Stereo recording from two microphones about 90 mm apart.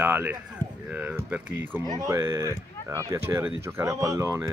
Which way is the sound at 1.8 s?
40° right (ahead or behind).